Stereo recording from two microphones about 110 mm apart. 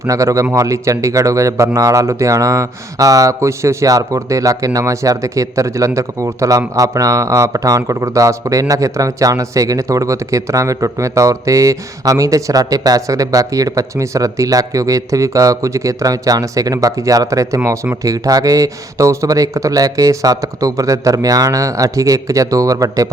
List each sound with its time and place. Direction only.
0.0 s a man's voice: 30° right (ahead or behind)